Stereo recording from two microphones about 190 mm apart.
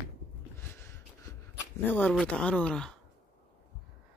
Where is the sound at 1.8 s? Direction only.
10° left (ahead or behind).